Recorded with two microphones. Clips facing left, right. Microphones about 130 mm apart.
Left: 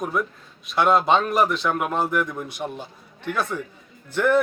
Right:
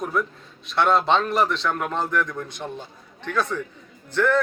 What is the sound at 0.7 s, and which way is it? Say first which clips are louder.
Speech: left 1 dB; 5° left (ahead or behind).